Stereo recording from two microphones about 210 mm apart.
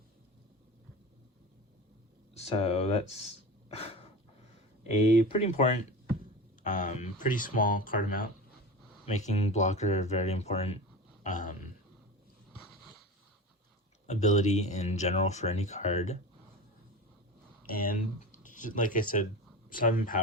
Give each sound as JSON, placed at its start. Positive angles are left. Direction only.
{"t": 2.3, "sound": "speech", "side_deg": 30}
{"t": 3.8, "sound": "a sound", "side_deg": 30}
{"t": 5.4, "sound": "speech", "side_deg": 35}
{"t": 11.2, "sound": "a sound", "side_deg": 35}
{"t": 14.1, "sound": "speech", "side_deg": 35}
{"t": 17.7, "sound": "speech", "side_deg": 45}